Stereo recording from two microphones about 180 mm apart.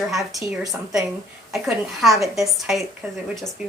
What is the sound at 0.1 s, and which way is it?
A woman's voice, centre (ahead or behind).